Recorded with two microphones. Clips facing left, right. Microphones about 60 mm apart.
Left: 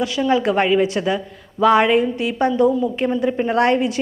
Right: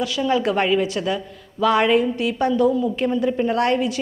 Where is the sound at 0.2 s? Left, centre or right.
Centre.